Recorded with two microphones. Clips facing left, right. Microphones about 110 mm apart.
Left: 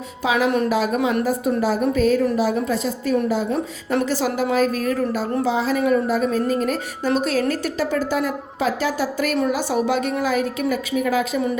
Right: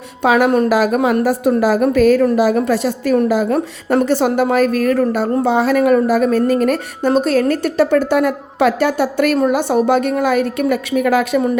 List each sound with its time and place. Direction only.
0.2 s a woman's voice: 60° right (ahead or behind)
0.7 s a woman's voice: 85° right
0.9 s a woman's voice: 50° right (ahead or behind)
1.2 s a woman's voice: 80° right
3.9 s a woman's voice: 50° right (ahead or behind)
7.1 s a woman's voice: 55° right (ahead or behind)